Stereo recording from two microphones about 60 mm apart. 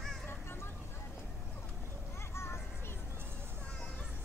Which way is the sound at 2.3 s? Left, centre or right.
Left.